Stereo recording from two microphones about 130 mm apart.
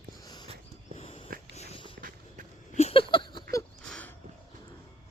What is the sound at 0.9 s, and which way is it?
Dog, 45° left (ahead or behind).